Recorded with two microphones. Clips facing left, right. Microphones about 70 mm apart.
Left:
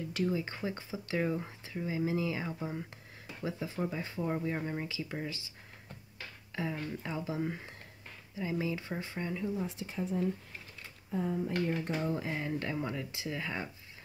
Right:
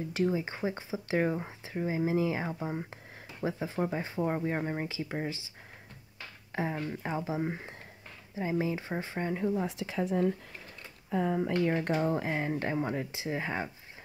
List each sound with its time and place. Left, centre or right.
0.2 s speech: right
1.1 s speech: right
6.5 s speech: right
9.3 s speech: right
9.7 s speech: right
12.1 s speech: right